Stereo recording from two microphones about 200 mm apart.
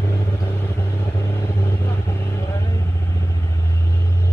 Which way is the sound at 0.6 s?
20° left (ahead or behind).